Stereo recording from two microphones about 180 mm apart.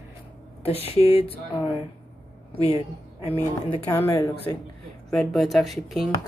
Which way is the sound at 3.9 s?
15° left (ahead or behind).